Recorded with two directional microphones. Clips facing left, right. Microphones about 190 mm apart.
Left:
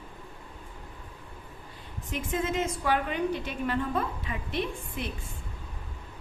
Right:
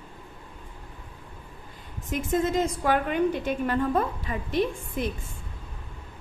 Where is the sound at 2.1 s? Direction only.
40° right (ahead or behind).